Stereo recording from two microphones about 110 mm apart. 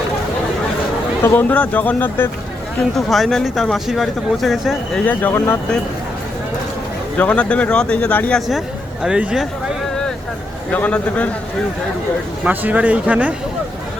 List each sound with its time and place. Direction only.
1.2 s speech: 20° left (ahead or behind)
3.1 s speech: centre (ahead or behind)
5.0 s speech: 20° left (ahead or behind)
7.2 s speech: 15° left (ahead or behind)
8.4 s speech: centre (ahead or behind)
10.7 s speech: 15° left (ahead or behind)
12.5 s speech: 15° right (ahead or behind)